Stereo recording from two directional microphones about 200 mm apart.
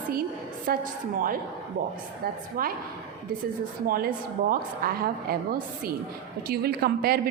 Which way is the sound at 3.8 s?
45° right (ahead or behind).